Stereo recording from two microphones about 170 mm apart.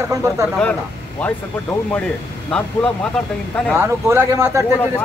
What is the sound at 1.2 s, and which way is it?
Speech, 10° left (ahead or behind).